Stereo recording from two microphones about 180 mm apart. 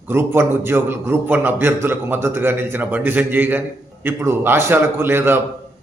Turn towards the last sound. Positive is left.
turn(degrees=-10)  # may be behind; listen again after turning